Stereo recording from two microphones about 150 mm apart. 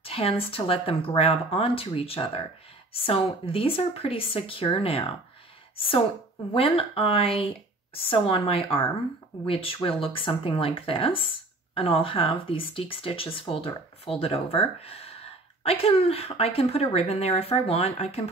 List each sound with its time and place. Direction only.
0.0 s speech: 40° left (ahead or behind)